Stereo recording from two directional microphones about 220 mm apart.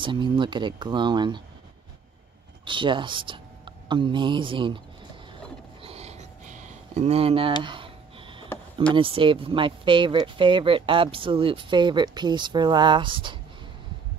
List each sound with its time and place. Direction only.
0.0 s speech: 20° right (ahead or behind)
2.6 s speech: 20° right (ahead or behind)
5.9 s a sound: 30° right (ahead or behind)
8.9 s speech: 25° right (ahead or behind)